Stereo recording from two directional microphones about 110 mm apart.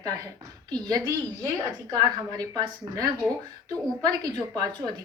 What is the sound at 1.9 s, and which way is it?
A woman's voice, 35° right (ahead or behind).